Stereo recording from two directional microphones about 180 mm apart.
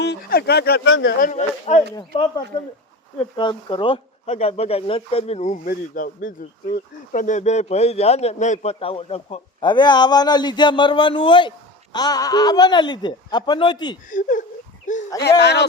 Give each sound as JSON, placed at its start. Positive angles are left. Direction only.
{"t": 0.0, "sound": "speech", "side_deg": 65}
{"t": 1.2, "sound": "speech", "side_deg": 40}
{"t": 2.0, "sound": "speech", "side_deg": 25}
{"t": 5.6, "sound": "speech", "side_deg": 50}
{"t": 14.1, "sound": "speech", "side_deg": 45}
{"t": 15.2, "sound": "speech", "side_deg": 70}